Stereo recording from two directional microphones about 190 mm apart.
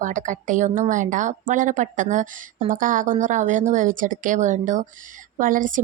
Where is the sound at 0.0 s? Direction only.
40° right (ahead or behind).